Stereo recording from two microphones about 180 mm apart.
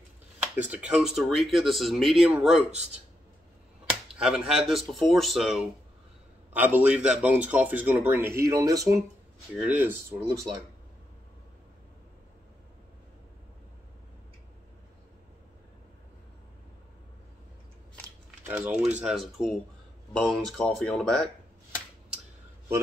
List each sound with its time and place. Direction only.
0.6 s speech: 5° right (ahead or behind)
2.7 s speech: 40° right (ahead or behind)
4.2 s speech: 5° right (ahead or behind)
18.4 s speech: 10° right (ahead or behind); by 21.3 s 5° left (ahead or behind)